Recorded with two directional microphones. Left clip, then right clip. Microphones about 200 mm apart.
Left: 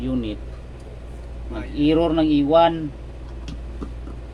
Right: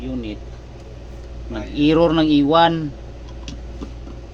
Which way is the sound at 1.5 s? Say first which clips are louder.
Right 3 dB; 25° right (ahead or behind).